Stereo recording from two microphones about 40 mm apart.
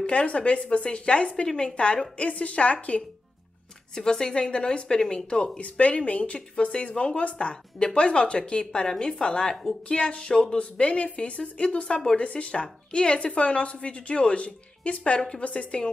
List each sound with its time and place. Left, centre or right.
0.0 s speech: left
3.9 s speech: centre; by 6.4 s left
6.5 s speech: left